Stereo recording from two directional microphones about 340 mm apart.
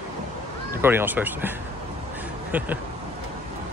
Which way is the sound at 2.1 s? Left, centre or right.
Centre.